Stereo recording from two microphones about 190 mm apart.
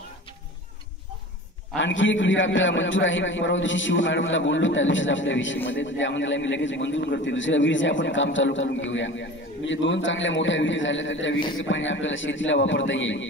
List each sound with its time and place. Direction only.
1.8 s a man's voice: 80° left